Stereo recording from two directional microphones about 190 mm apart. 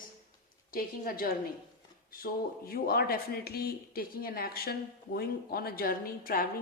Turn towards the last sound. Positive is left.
turn(degrees=50)  # may be behind; listen again after turning